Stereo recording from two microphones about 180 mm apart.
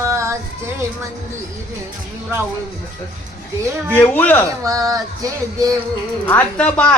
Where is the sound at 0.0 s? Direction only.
15° right (ahead or behind).